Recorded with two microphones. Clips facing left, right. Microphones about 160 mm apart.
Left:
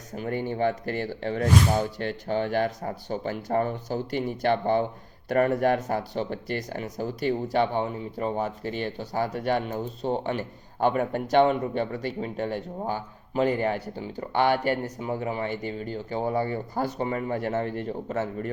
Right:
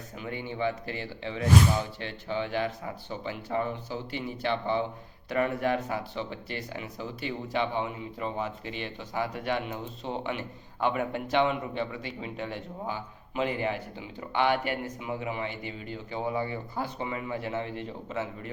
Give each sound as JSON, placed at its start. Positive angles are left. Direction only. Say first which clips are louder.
{"t": 0.2, "sound": "speech", "louder": "left 6 dB", "side_deg": 45}